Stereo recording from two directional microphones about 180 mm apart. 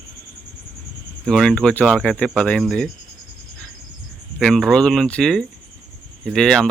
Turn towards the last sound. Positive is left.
turn(degrees=5)  # may be behind; listen again after turning